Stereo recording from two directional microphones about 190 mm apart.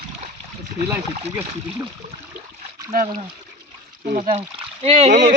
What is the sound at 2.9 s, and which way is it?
Speech, 45° right (ahead or behind).